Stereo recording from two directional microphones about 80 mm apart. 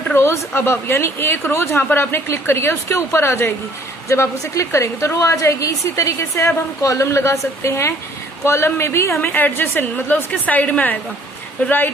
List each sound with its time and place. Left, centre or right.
0.1 s a woman's voice: left